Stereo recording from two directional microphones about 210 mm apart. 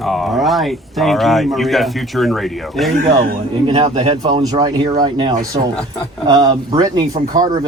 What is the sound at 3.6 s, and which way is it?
Speech, 25° right (ahead or behind).